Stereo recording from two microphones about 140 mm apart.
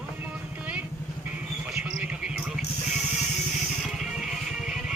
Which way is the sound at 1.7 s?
5° right (ahead or behind).